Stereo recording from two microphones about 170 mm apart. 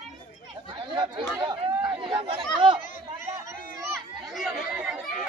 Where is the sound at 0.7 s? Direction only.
25° right (ahead or behind).